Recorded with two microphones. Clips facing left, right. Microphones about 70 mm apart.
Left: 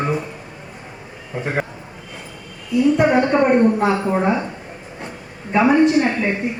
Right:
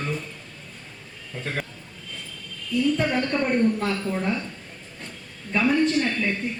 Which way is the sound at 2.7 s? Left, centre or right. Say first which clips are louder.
Left 8 dB; centre.